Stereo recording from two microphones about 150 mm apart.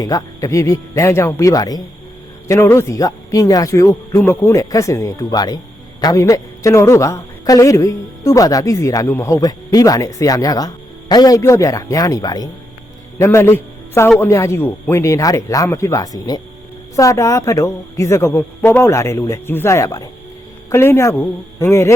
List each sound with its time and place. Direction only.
0.0 s a man's voice: 25° left (ahead or behind)